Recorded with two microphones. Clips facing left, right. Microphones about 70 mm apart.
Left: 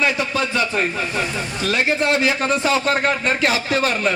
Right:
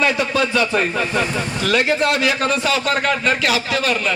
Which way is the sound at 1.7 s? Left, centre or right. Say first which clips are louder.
Right 1 dB; left.